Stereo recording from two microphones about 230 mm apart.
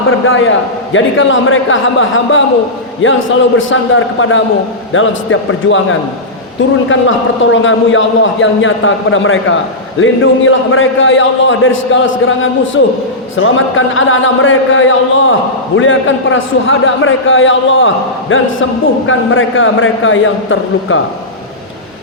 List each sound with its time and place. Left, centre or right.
0.1 s a man's voice: left
7.5 s a man's voice: left